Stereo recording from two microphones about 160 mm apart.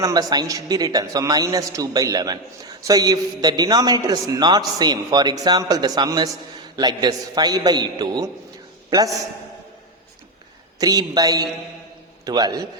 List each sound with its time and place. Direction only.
0.0 s a man's voice: 25° right (ahead or behind)
10.8 s a man's voice: 25° right (ahead or behind)